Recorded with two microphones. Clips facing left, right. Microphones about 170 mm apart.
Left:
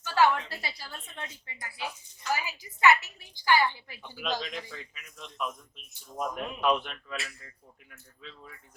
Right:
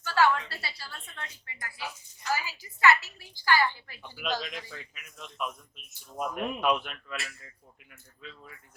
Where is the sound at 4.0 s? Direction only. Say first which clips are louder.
Even; 10° right (ahead or behind).